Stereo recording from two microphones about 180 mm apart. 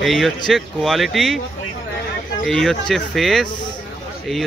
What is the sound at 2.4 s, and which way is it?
Speech, centre (ahead or behind).